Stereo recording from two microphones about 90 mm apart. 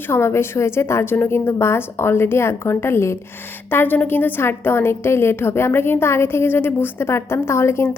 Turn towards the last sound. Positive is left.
turn(degrees=30)  # may be behind; listen again after turning